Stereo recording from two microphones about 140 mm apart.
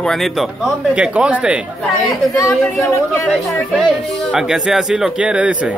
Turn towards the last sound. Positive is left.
turn(degrees=-10)  # may be behind; listen again after turning